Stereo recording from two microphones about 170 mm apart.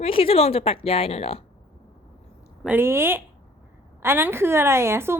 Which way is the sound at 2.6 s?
15° right (ahead or behind).